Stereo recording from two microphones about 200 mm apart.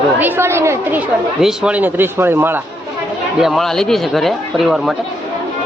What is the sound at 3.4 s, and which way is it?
Speech, centre (ahead or behind).